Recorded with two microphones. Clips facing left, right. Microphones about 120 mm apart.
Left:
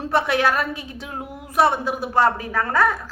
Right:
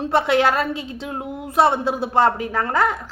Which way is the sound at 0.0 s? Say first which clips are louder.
Right 2 dB; 20° right (ahead or behind).